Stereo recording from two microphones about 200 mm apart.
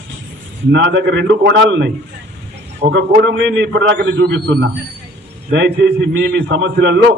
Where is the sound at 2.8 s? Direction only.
50° right (ahead or behind).